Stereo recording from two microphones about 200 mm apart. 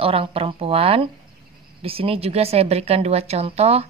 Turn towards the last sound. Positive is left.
turn(degrees=-30)  # may be behind; listen again after turning